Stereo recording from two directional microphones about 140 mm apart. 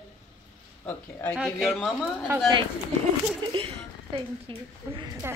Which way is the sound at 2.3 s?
20° right (ahead or behind).